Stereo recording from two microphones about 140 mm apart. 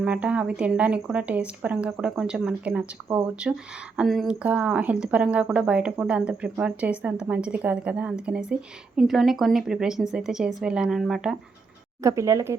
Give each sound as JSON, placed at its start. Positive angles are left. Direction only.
{"t": 0.0, "sound": "speech", "side_deg": -10}
{"t": 12.0, "sound": "speech", "side_deg": -20}